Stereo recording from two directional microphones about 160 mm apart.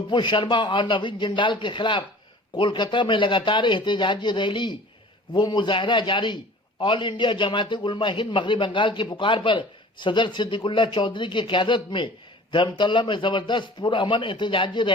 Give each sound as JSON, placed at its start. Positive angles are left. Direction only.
{"t": 0.1, "sound": "a man's voice", "side_deg": 30}